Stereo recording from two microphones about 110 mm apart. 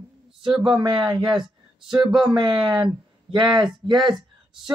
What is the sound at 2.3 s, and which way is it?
Speech, 40° right (ahead or behind).